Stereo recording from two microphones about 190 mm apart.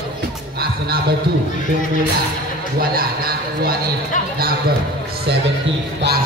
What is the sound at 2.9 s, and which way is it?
Speech, 50° right (ahead or behind).